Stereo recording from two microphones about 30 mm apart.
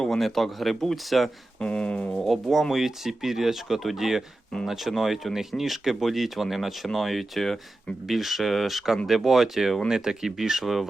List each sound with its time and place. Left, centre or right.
0.1 s speech: centre
1.5 s speech: left
2.2 s speech: centre
8.0 s speech: centre
9.9 s speech: right